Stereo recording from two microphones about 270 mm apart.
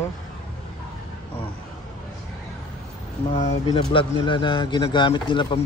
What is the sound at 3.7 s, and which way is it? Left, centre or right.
Speech, centre.